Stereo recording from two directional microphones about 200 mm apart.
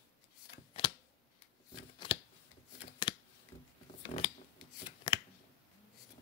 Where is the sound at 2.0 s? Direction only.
25° left (ahead or behind).